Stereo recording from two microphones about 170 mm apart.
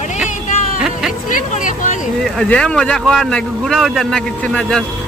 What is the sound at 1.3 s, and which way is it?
Speech, 50° left (ahead or behind).